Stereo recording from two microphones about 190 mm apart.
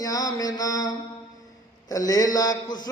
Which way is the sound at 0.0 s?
20° left (ahead or behind).